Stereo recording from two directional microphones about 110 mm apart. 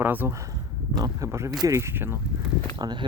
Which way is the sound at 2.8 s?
40° right (ahead or behind).